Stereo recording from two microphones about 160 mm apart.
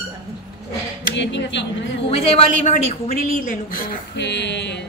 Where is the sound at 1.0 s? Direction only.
90° left.